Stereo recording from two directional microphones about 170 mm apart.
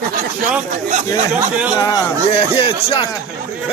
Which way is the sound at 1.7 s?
20° left (ahead or behind).